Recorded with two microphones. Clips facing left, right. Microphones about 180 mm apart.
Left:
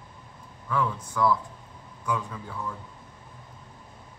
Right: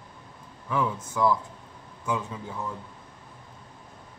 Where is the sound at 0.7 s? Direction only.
20° right (ahead or behind).